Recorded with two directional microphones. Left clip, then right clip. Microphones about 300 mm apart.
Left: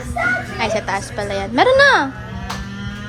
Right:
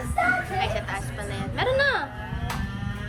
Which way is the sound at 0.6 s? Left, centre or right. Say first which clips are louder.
Left 8 dB; centre.